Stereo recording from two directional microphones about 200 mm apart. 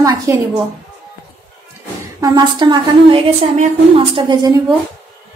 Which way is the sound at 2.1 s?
20° right (ahead or behind).